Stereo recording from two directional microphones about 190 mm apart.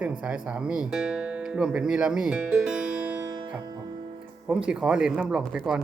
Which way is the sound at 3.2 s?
20° right (ahead or behind).